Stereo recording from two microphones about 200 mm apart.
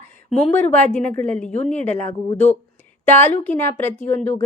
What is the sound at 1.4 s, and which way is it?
Speech, 35° left (ahead or behind).